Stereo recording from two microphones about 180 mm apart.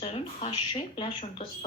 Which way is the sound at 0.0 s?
30° left (ahead or behind).